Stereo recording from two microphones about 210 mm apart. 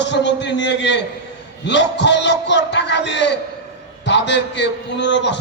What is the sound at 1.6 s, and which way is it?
A man's voice, 55° left (ahead or behind).